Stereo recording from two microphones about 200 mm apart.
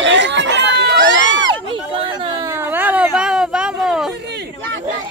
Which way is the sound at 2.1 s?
20° right (ahead or behind).